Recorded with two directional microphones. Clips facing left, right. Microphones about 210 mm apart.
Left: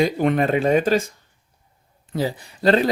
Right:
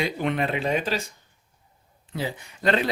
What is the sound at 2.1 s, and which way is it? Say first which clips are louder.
Speech: left 6 dB; 40° left (ahead or behind).